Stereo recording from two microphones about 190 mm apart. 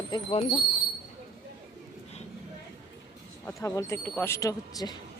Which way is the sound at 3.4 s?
15° left (ahead or behind).